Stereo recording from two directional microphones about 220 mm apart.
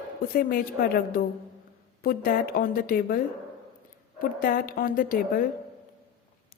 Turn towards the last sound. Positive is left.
turn(degrees=40)  # may be behind; listen again after turning